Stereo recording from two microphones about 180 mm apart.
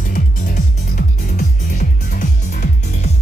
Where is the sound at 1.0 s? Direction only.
45° left (ahead or behind).